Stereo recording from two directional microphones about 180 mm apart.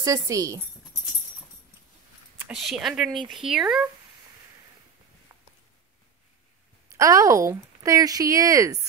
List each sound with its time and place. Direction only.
0.0 s speech: 20° right (ahead or behind)
2.3 s speech: 5° right (ahead or behind)
6.9 s speech: 20° right (ahead or behind)